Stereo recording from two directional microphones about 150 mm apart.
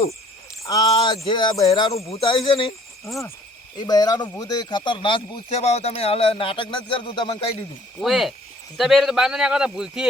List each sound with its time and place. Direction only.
0.6 s speech: 25° left (ahead or behind)
2.0 s speech: 45° left (ahead or behind)
3.8 s speech: 25° left (ahead or behind)
7.9 s a man's voice: centre (ahead or behind)